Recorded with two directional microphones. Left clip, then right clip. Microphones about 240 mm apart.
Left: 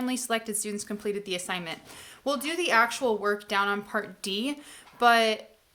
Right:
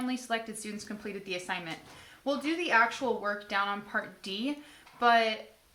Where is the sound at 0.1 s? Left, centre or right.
Left.